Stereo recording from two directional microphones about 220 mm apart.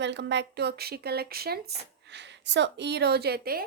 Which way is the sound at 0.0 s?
50° right (ahead or behind).